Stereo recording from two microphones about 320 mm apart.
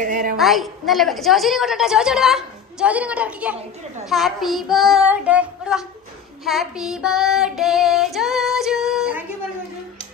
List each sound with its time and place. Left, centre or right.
0.0 s a sound: right
0.4 s a woman's voice: centre
6.4 s child singing: centre